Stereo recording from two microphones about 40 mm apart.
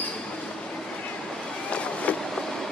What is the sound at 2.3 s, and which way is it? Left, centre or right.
Vehicle, centre.